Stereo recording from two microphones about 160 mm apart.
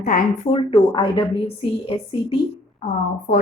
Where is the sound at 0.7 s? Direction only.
35° left (ahead or behind).